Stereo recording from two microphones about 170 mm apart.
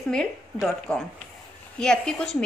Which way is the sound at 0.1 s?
5° left (ahead or behind).